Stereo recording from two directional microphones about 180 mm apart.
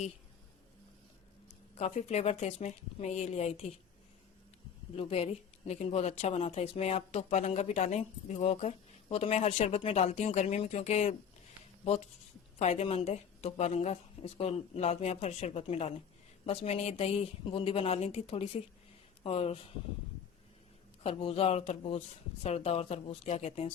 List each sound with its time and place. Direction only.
1.7 s speech: 35° left (ahead or behind)
4.9 s speech: 30° left (ahead or behind)
12.5 s speech: 35° left (ahead or behind)
21.0 s speech: 30° left (ahead or behind)